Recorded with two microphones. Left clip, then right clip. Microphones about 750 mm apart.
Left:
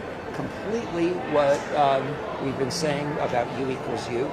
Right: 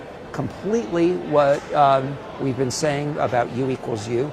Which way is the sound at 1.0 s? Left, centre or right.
Right.